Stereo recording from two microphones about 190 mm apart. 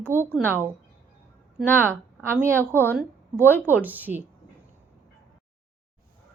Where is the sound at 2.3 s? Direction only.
15° right (ahead or behind).